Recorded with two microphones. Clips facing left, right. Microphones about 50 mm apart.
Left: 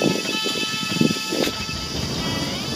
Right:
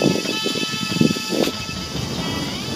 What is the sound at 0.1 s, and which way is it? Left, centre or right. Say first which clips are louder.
Music: right 2 dB; centre.